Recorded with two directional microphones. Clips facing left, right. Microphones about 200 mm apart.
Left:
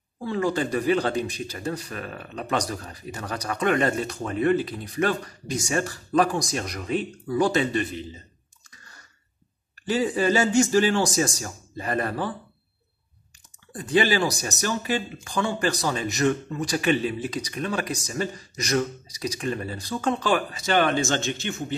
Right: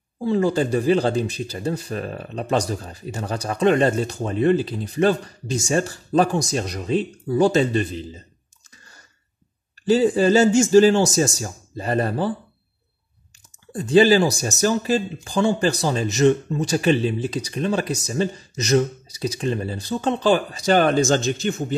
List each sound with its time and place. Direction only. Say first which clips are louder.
0.2 s speech: right 5 dB; 30° right (ahead or behind)
9.8 s speech: right 6 dB; 30° right (ahead or behind)
13.7 s speech: right 7 dB; 30° right (ahead or behind)